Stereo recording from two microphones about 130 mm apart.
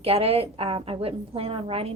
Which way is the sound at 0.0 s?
50° right (ahead or behind).